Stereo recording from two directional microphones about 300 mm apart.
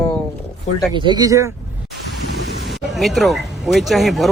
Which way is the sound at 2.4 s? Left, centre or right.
Right.